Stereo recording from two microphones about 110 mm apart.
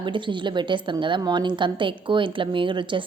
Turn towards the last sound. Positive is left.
turn(degrees=-50)  # may be behind; listen again after turning